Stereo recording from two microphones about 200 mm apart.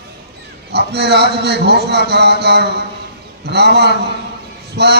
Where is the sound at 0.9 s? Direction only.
55° right (ahead or behind).